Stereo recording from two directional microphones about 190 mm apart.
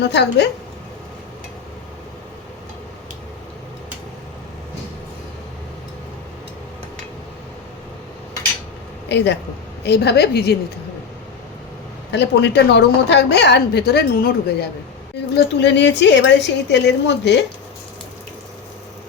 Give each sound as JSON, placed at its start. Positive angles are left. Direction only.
{"t": 0.0, "sound": "a woman's voice", "side_deg": 65}
{"t": 9.0, "sound": "a woman's voice", "side_deg": 65}
{"t": 12.1, "sound": "a woman's voice", "side_deg": 65}
{"t": 15.4, "sound": "a woman's voice", "side_deg": 70}